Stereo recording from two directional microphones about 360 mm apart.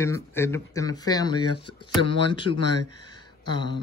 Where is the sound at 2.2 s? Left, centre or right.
Centre.